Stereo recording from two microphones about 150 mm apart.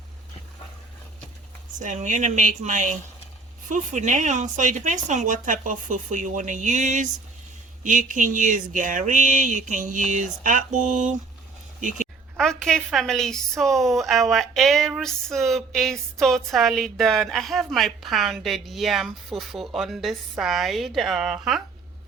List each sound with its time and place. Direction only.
1.7 s speech: 55° right (ahead or behind)
12.4 s a woman's voice: 5° left (ahead or behind)